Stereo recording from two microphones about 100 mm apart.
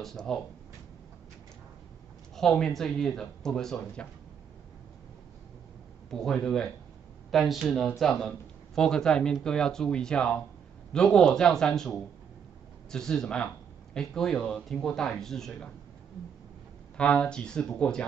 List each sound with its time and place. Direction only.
0.0 s speech: 5° left (ahead or behind)
2.3 s speech: 5° left (ahead or behind)
6.0 s speech: 5° left (ahead or behind)
12.9 s speech: 5° left (ahead or behind)
16.9 s speech: 10° left (ahead or behind)